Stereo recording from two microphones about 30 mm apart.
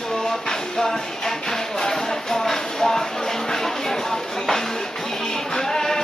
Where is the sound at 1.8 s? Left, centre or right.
Centre.